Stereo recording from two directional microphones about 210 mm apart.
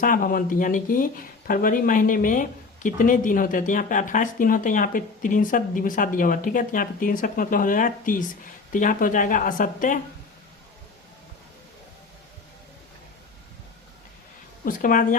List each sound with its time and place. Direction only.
0.0 s speech: 40° left (ahead or behind)
14.6 s speech: 40° left (ahead or behind)